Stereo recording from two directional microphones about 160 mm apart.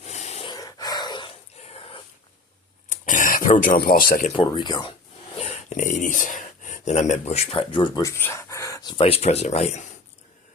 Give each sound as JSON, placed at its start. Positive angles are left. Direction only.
{"t": 0.0, "sound": "a sound", "side_deg": 45}
{"t": 0.5, "sound": "dog", "side_deg": 25}
{"t": 2.9, "sound": "throat clearing", "side_deg": 55}
{"t": 3.8, "sound": "speech", "side_deg": 65}
{"t": 4.4, "sound": "speech", "side_deg": 30}
{"t": 5.4, "sound": "speech", "side_deg": 45}